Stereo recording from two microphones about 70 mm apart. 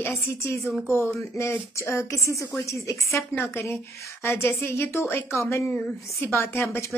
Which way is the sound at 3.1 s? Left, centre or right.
Left.